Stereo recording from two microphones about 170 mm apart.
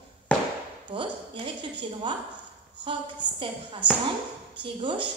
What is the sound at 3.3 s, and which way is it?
A woman's voice, 30° right (ahead or behind).